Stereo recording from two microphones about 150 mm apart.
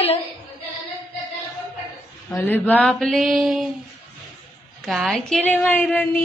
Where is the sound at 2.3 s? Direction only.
10° left (ahead or behind).